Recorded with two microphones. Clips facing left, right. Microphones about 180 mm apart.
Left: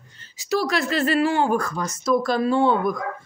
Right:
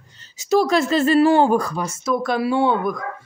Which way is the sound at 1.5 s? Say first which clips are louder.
Right 3 dB; 15° right (ahead or behind).